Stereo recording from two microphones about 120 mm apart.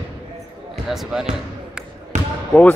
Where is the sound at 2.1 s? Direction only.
75° right (ahead or behind).